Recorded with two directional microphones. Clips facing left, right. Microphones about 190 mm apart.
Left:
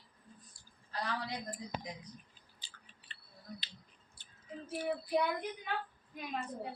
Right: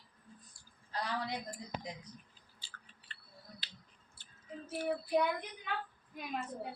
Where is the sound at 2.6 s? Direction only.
20° left (ahead or behind).